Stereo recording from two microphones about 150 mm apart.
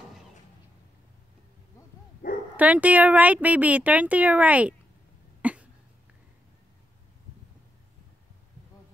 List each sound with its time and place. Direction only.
2.5 s speech: 10° right (ahead or behind)
5.4 s cough: 10° right (ahead or behind)